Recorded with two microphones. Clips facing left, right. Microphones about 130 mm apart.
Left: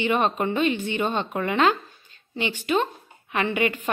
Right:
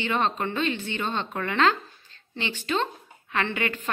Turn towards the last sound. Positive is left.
turn(degrees=15)  # may be behind; listen again after turning